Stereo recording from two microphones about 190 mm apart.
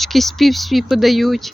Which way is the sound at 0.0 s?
Centre (ahead or behind).